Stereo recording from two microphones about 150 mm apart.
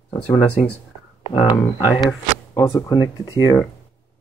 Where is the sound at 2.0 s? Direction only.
25° left (ahead or behind).